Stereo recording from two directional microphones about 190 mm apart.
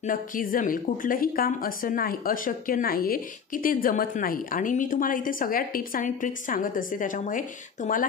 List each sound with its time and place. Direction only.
0.0 s a woman's voice: 45° left (ahead or behind)